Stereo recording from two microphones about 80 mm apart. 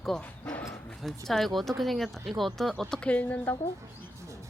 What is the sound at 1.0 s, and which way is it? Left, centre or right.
A woman's voice, centre.